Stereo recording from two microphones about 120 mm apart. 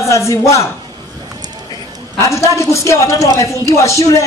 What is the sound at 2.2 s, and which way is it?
A man's voice, 25° left (ahead or behind).